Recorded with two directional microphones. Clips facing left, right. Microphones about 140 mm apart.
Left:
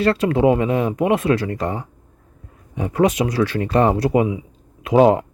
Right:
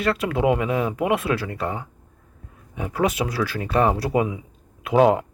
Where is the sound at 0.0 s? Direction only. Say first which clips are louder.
Left 5 dB; 30° left (ahead or behind).